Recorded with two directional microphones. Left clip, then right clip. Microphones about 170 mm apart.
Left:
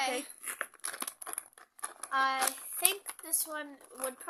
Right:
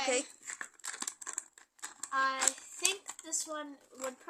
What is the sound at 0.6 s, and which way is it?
Scissors, 20° left (ahead or behind).